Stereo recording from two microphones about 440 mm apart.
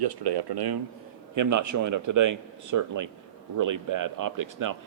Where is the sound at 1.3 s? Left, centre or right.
Right.